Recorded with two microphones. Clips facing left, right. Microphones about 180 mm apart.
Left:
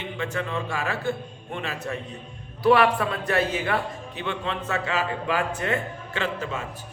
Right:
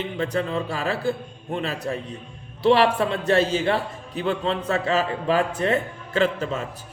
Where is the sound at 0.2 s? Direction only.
35° right (ahead or behind).